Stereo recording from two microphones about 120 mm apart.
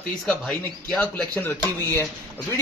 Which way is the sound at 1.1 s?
15° left (ahead or behind).